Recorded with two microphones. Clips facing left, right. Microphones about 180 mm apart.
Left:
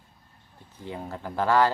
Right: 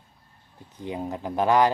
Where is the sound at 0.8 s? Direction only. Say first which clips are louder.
Right 5 dB; 15° right (ahead or behind).